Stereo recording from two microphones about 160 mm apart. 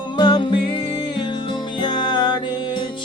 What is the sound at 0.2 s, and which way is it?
Music, 25° left (ahead or behind).